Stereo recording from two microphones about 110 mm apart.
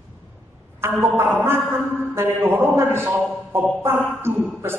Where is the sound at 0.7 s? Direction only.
25° right (ahead or behind).